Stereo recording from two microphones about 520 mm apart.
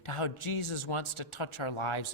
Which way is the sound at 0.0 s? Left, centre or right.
Left.